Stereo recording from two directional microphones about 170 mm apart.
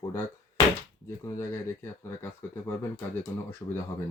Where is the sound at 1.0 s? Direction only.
15° left (ahead or behind).